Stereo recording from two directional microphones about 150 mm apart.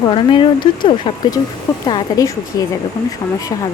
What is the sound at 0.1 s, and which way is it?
Speech, 35° left (ahead or behind).